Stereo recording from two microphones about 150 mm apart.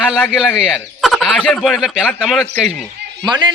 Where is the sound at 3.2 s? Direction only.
30° right (ahead or behind).